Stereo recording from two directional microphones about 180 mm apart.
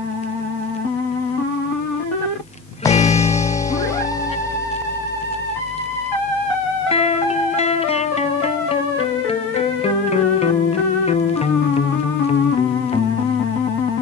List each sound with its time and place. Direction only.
2.9 s music: 40° left (ahead or behind)
6.9 s music: 35° left (ahead or behind)